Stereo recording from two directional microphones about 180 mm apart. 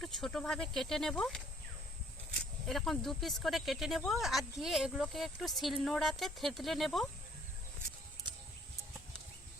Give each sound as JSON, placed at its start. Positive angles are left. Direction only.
{"t": 0.0, "sound": "speech", "side_deg": 0}
{"t": 2.4, "sound": "speech", "side_deg": 0}